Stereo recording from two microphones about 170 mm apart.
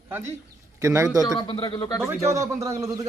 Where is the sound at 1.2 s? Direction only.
30° left (ahead or behind).